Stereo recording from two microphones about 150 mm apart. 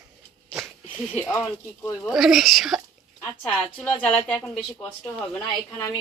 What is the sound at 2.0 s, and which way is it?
Speech, centre (ahead or behind).